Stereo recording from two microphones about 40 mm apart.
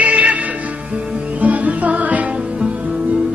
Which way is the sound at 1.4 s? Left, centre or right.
Right.